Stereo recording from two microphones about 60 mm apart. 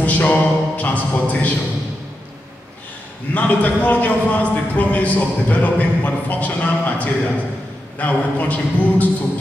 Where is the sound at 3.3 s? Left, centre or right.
Left.